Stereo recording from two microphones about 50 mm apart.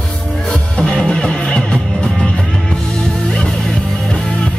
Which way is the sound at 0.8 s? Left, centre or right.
Centre.